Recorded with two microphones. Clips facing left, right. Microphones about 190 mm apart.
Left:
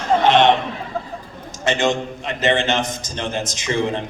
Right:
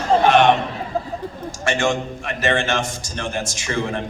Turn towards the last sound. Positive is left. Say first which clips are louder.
# left 3 dB
turn(degrees=20)  # may be behind; listen again after turning